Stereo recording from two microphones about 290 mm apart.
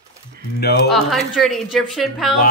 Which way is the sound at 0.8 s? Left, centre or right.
Centre.